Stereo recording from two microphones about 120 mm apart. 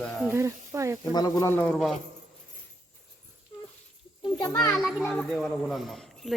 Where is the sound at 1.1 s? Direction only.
35° left (ahead or behind).